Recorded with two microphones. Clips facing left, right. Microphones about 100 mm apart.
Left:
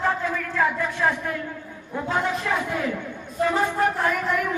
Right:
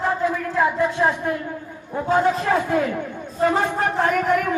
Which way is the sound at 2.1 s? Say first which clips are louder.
Right 6 dB; 40° right (ahead or behind).